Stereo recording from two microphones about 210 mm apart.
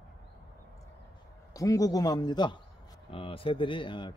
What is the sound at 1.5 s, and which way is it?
A man's voice, 15° left (ahead or behind).